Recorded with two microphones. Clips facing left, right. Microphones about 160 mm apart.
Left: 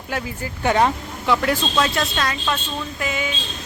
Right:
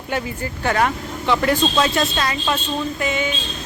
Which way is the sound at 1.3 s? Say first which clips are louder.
Right 2 dB; centre (ahead or behind).